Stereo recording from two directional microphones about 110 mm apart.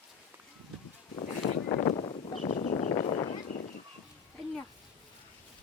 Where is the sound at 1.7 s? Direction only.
60° left (ahead or behind); by 2.7 s 90° left.